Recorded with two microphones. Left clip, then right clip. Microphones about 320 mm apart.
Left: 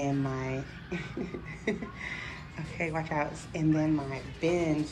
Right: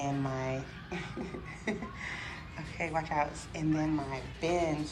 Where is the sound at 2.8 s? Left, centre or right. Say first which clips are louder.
Even; centre.